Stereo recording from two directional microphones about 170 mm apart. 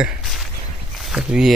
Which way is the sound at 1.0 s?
5° right (ahead or behind).